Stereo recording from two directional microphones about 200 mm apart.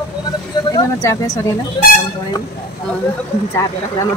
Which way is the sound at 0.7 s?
15° left (ahead or behind).